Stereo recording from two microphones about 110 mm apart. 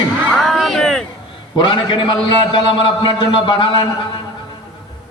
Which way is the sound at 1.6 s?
45° left (ahead or behind).